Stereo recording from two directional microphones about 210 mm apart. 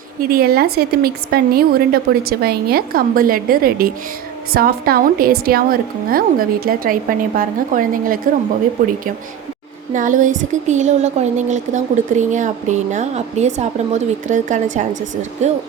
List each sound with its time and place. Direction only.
0.2 s a woman's voice: 45° right (ahead or behind)